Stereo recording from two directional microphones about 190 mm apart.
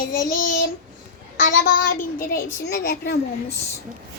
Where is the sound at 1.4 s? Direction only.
45° left (ahead or behind).